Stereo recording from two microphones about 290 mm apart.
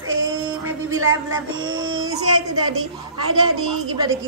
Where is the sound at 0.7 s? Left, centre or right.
Right.